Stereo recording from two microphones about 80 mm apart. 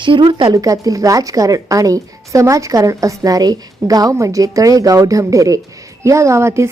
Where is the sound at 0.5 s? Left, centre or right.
Right.